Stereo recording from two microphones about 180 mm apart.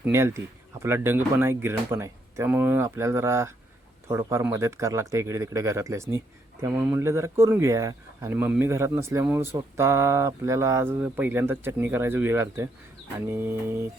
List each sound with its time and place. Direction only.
0.0 s speech: 15° right (ahead or behind)